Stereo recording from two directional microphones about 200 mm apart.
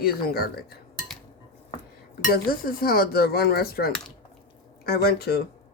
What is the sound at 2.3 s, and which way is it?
Speech, 45° left (ahead or behind).